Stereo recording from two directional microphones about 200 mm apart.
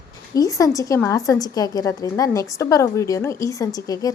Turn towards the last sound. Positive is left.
turn(degrees=20)  # may be behind; listen again after turning